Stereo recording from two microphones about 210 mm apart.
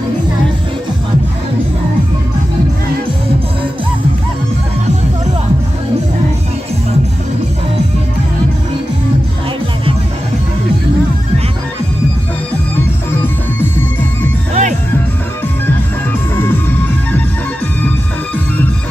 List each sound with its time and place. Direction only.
13.2 s music: 10° left (ahead or behind)
14.5 s music: 35° right (ahead or behind)
16.3 s music: 10° left (ahead or behind)